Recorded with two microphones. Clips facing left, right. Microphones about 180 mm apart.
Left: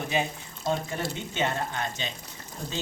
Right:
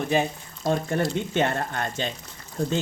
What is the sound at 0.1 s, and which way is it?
Speech, 50° right (ahead or behind).